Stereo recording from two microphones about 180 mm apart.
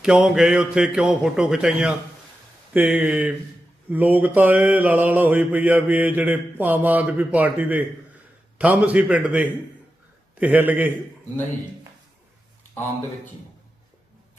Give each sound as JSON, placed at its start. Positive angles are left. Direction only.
{"t": 0.0, "sound": "a man's voice", "side_deg": -5}
{"t": 2.7, "sound": "mantra", "side_deg": -10}